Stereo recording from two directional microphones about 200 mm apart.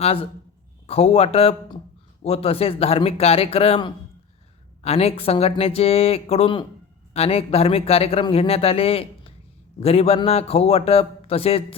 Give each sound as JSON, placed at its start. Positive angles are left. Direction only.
{"t": 0.0, "sound": "a man's voice", "side_deg": 30}